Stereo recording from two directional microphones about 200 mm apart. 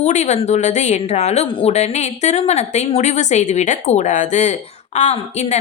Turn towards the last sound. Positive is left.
turn(degrees=35)  # may be behind; listen again after turning